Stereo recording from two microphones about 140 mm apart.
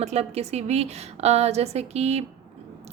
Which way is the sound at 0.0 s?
50° right (ahead or behind).